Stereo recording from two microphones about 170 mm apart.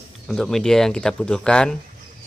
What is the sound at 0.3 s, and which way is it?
Speech, 5° left (ahead or behind).